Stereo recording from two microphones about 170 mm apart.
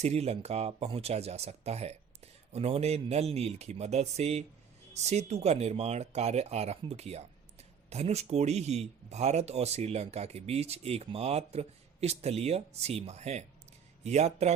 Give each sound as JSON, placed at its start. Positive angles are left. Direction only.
{"t": 0.0, "sound": "speech", "side_deg": -40}